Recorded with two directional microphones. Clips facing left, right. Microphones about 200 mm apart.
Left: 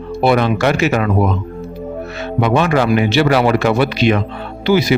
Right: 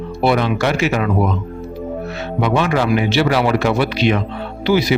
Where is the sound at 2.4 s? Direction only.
50° left (ahead or behind).